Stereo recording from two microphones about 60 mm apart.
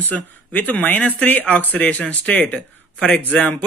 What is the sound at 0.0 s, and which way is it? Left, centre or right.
Speech, left.